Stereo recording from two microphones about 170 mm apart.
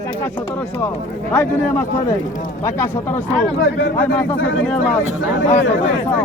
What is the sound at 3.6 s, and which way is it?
Speech, 90° left.